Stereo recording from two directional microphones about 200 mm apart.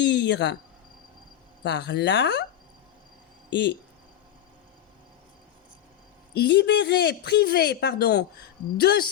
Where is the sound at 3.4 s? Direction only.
60° left (ahead or behind).